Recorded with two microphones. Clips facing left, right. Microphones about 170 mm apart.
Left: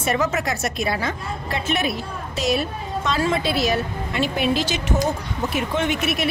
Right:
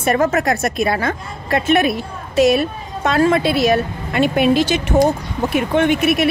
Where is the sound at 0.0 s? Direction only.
55° right (ahead or behind).